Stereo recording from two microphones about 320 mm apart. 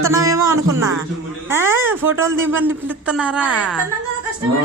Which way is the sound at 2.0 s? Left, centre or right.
Right.